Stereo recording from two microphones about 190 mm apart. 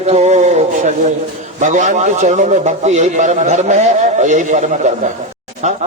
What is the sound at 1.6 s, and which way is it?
A man's voice, 40° right (ahead or behind).